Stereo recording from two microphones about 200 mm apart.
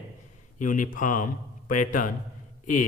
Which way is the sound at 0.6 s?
40° left (ahead or behind).